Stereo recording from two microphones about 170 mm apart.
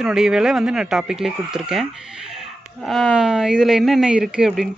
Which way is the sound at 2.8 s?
Centre (ahead or behind).